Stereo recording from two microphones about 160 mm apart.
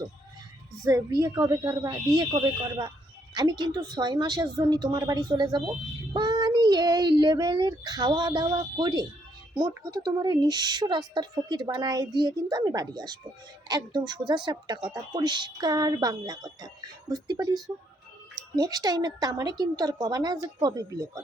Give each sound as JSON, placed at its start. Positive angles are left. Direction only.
{"t": 0.9, "sound": "speech", "side_deg": -20}